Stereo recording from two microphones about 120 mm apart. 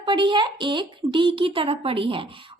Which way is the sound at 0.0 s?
40° right (ahead or behind).